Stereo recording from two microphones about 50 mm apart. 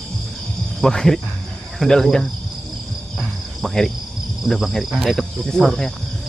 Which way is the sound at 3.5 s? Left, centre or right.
Centre.